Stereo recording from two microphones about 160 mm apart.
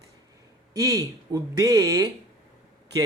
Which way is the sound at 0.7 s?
20° right (ahead or behind).